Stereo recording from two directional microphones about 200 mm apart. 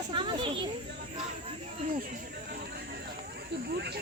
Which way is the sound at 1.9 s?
45° right (ahead or behind).